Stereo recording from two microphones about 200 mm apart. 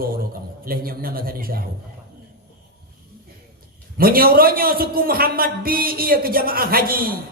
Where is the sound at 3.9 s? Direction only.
45° right (ahead or behind).